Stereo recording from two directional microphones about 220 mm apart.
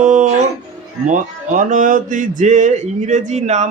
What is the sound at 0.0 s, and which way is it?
Music, 35° right (ahead or behind).